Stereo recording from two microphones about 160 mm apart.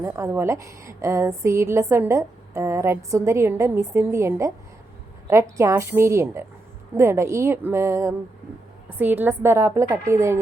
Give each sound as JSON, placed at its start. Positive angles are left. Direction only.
{"t": 0.0, "sound": "a woman's voice", "side_deg": -20}